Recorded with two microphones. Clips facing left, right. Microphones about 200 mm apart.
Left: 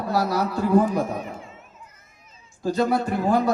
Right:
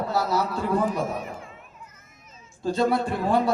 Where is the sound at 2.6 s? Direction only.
25° right (ahead or behind).